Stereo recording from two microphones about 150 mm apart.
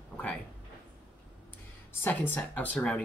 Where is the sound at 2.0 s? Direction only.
15° left (ahead or behind).